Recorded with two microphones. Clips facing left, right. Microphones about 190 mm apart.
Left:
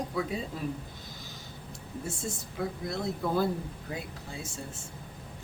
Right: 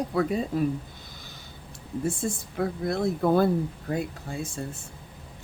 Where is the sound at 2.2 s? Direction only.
60° right (ahead or behind).